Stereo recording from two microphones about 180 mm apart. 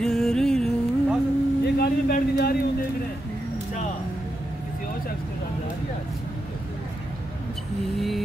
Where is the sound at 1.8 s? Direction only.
60° left (ahead or behind).